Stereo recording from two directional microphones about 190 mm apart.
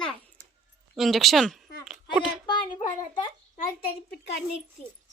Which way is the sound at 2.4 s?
25° left (ahead or behind).